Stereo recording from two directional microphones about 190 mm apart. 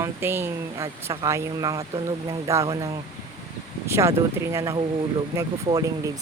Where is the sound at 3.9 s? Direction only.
15° right (ahead or behind).